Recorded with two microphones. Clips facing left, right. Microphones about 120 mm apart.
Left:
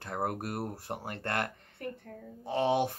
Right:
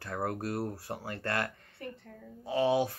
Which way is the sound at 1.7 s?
55° left (ahead or behind).